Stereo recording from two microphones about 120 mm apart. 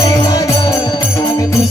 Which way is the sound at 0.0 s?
30° left (ahead or behind).